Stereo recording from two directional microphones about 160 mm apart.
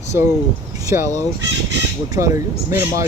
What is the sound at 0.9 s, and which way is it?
Speech, 20° right (ahead or behind).